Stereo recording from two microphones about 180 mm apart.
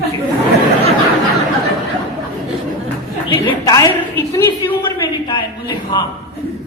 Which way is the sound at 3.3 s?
20° left (ahead or behind).